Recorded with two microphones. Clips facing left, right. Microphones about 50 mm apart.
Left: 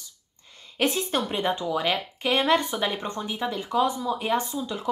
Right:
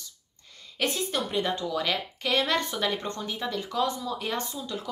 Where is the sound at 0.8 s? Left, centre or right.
Left.